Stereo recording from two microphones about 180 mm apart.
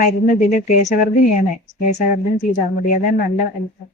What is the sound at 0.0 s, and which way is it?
Speech, 50° left (ahead or behind).